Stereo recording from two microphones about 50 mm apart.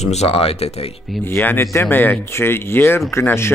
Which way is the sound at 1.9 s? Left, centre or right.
Left.